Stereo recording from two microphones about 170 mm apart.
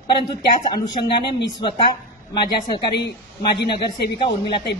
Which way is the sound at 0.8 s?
30° left (ahead or behind).